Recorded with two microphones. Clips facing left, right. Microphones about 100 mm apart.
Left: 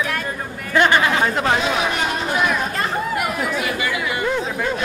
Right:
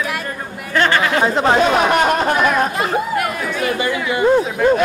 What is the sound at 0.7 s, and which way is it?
Speech, 15° left (ahead or behind).